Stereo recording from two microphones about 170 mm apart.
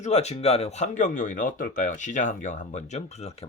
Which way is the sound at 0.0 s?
40° left (ahead or behind).